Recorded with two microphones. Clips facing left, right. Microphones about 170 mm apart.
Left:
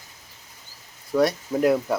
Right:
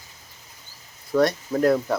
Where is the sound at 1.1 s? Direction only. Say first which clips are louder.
Right 1 dB; 10° left (ahead or behind).